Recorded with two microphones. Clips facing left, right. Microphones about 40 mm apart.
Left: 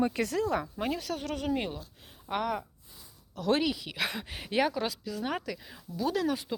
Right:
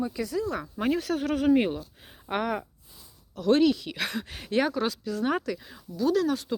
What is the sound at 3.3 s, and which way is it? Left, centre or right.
Speech, centre.